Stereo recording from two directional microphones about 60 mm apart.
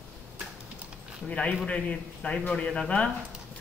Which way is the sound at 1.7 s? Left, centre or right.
Centre.